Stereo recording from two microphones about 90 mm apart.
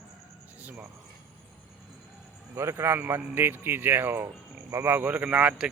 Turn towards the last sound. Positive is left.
turn(degrees=-15)  # may be behind; listen again after turning